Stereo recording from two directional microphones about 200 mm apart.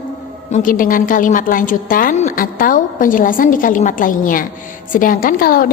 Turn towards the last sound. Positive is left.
turn(degrees=45)  # may be behind; listen again after turning